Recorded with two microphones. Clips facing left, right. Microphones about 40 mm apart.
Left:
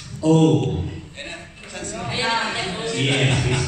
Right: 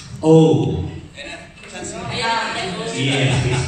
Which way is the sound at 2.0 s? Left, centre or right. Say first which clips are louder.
Right 2 dB; centre.